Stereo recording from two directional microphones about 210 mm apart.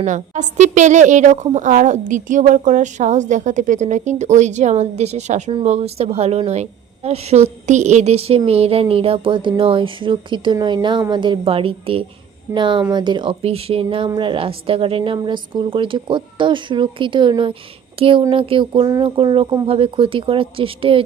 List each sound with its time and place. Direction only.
0.0 s a woman's voice: 35° right (ahead or behind)